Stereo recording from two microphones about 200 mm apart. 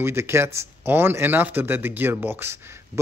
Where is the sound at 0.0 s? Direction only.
15° right (ahead or behind).